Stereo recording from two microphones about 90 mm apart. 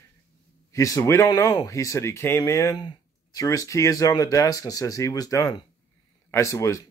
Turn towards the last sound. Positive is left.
turn(degrees=35)  # may be behind; listen again after turning